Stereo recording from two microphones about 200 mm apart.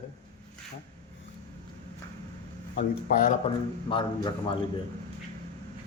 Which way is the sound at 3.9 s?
25° left (ahead or behind).